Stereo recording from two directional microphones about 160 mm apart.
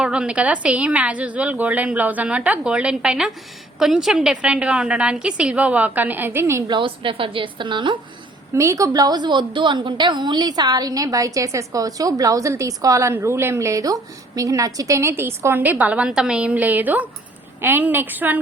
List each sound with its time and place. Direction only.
0.0 s a woman's voice: 5° right (ahead or behind)
6.7 s a woman's voice: 35° right (ahead or behind)
8.5 s a woman's voice: 20° right (ahead or behind)